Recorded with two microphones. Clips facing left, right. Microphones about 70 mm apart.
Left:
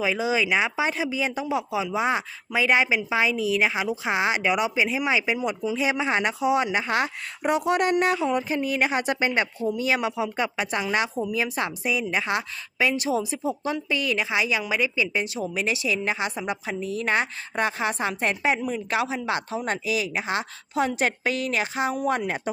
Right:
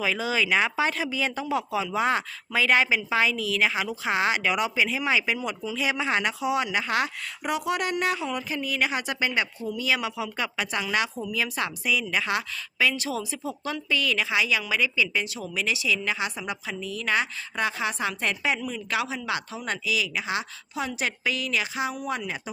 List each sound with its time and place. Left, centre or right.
0.0 s a woman's voice: centre; by 22.4 s left